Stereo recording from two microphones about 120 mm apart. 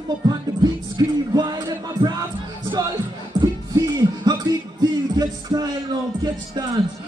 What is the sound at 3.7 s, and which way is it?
Music, 35° right (ahead or behind).